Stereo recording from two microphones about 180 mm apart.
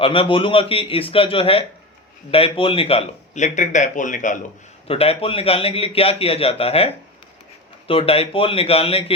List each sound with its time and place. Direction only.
0.0 s a man's voice: 30° left (ahead or behind); by 4.4 s 45° left (ahead or behind)
4.9 s a man's voice: 30° left (ahead or behind)